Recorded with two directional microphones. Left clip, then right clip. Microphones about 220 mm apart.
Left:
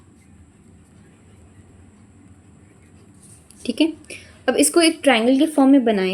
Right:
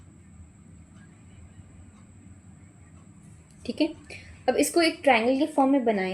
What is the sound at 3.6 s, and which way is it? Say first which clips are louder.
A woman's voice: left 7 dB; 40° left (ahead or behind).